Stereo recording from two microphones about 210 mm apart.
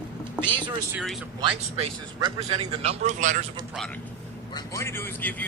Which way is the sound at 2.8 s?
35° right (ahead or behind).